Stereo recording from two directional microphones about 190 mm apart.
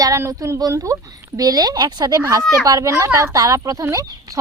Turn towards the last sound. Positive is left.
turn(degrees=-15)  # may be behind; listen again after turning